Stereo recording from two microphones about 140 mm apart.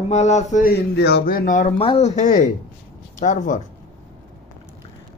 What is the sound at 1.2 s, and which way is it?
Speech, 80° left.